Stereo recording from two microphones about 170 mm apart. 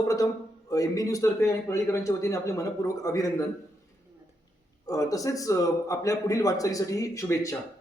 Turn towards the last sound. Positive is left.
turn(degrees=20)  # may be behind; listen again after turning